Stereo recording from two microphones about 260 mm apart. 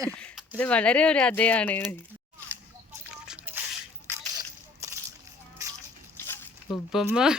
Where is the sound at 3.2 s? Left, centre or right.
Centre.